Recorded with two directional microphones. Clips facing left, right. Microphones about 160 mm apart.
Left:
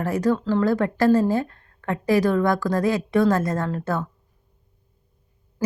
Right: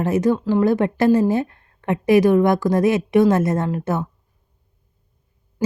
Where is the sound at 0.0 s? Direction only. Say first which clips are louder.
Right 3 dB; 20° right (ahead or behind).